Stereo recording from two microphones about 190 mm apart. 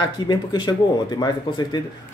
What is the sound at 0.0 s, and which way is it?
A man's voice, 20° left (ahead or behind).